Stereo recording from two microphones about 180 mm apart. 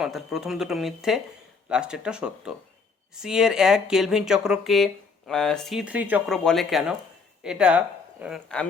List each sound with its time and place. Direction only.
0.0 s speech: centre (ahead or behind)
6.3 s speech: centre (ahead or behind)